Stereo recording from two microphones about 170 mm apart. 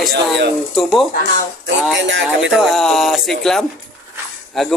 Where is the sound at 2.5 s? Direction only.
Centre (ahead or behind).